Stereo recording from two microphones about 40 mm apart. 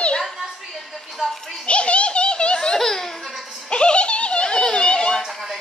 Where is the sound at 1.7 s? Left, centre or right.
Left.